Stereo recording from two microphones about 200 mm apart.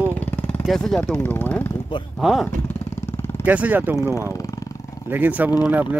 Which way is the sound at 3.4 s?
10° right (ahead or behind).